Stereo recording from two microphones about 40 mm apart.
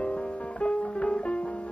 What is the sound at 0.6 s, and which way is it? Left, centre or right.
Music, left.